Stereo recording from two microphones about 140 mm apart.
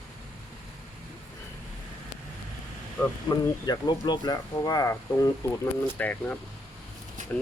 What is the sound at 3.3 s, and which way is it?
Speech, 30° left (ahead or behind).